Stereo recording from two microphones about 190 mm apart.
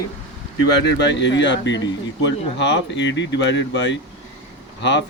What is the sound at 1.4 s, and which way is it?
Speech, 70° left (ahead or behind).